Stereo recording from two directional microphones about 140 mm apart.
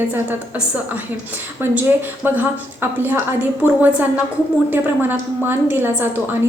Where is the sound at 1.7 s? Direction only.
15° right (ahead or behind).